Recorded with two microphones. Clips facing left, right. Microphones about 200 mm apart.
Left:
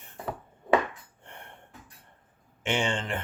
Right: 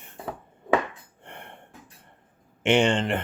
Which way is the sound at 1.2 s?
70° right (ahead or behind).